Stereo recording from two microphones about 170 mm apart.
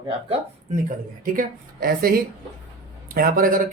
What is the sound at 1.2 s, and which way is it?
Speech, 55° right (ahead or behind).